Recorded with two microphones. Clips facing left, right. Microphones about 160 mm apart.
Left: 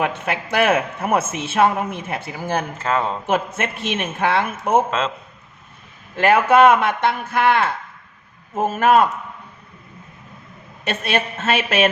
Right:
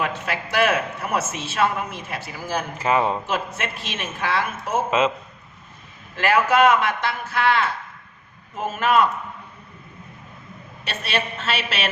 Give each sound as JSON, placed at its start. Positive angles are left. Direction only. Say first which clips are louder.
{"t": 0.0, "sound": "speech", "louder": "left 3 dB", "side_deg": 60}
{"t": 2.7, "sound": "speech", "louder": "right 1 dB", "side_deg": -10}
{"t": 3.2, "sound": "speech", "louder": "left 5 dB", "side_deg": 55}
{"t": 4.9, "sound": "speech", "louder": "right 3 dB", "side_deg": -10}
{"t": 6.2, "sound": "a man's voice", "louder": "left 4 dB", "side_deg": 55}
{"t": 10.8, "sound": "a man's voice", "louder": "left 5 dB", "side_deg": 50}